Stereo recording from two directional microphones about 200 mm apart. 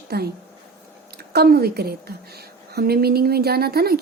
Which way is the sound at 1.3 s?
50° right (ahead or behind).